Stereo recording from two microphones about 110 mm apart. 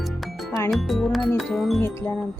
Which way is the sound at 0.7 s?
Centre (ahead or behind).